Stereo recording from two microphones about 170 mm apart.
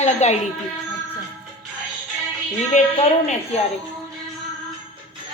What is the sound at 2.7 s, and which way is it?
Speech, 45° left (ahead or behind).